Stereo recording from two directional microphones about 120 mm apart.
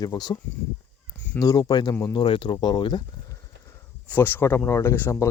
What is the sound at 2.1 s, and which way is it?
Speech, 45° left (ahead or behind).